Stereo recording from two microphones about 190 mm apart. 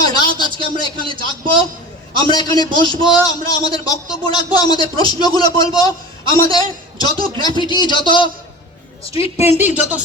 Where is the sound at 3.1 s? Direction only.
20° left (ahead or behind).